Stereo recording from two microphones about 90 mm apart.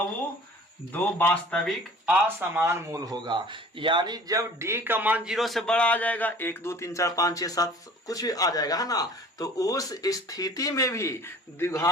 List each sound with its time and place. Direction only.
0.9 s speech: 15° left (ahead or behind)
2.0 s speech: 20° right (ahead or behind)
3.1 s speech: 60° right (ahead or behind); by 5.3 s 15° right (ahead or behind)
5.3 s speech: centre (ahead or behind); by 11.8 s 30° left (ahead or behind)